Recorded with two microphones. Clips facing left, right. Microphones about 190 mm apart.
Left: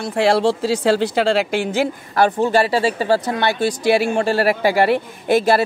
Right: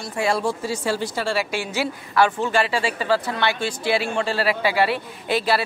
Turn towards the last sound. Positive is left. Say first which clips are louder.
# left 6 dB
turn(degrees=50)  # may be behind; listen again after turning